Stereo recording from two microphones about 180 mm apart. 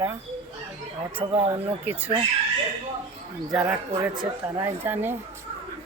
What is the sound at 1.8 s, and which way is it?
Speech, 10° right (ahead or behind).